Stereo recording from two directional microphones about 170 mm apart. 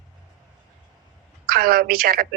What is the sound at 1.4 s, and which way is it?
Speech, 60° right (ahead or behind).